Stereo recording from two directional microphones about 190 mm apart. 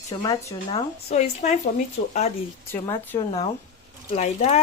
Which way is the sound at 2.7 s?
10° left (ahead or behind).